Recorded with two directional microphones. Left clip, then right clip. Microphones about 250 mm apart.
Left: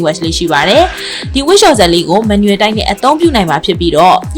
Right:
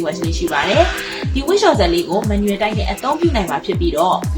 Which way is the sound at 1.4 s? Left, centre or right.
Left.